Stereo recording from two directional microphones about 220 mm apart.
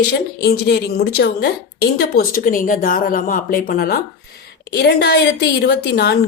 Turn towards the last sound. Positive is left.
turn(degrees=50)  # may be behind; listen again after turning